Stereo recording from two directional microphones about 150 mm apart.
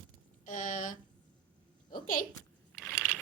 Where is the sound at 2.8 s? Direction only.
10° right (ahead or behind).